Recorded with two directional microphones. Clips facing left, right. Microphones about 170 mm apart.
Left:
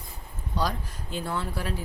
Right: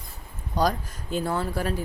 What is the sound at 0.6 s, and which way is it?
Speech, 45° right (ahead or behind).